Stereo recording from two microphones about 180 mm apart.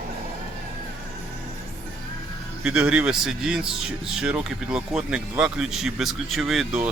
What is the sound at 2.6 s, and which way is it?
Speech, 5° right (ahead or behind).